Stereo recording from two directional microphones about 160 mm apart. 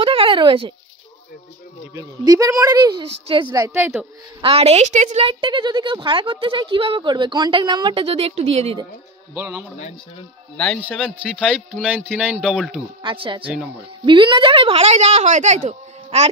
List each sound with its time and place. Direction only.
0.0 s a sound: 35° right (ahead or behind)
2.0 s a woman's voice: 20° right (ahead or behind)
3.5 s speech: 20° right (ahead or behind)
4.4 s speech: 35° right (ahead or behind)
5.2 s speech: 35° right (ahead or behind)
9.3 s speech: 15° right (ahead or behind)
11.3 s speech: 5° left (ahead or behind)
13.0 s a woman's voice: 35° right (ahead or behind)